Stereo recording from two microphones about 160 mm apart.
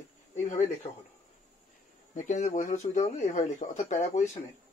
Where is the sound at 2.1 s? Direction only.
50° left (ahead or behind).